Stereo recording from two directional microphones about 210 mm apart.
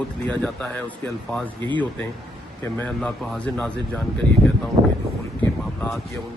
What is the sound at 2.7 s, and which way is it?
Speech, 5° left (ahead or behind).